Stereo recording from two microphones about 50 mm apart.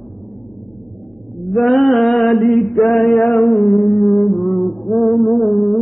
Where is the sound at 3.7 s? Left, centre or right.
Centre.